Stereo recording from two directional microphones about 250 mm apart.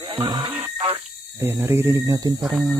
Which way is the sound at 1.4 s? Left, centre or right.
Centre.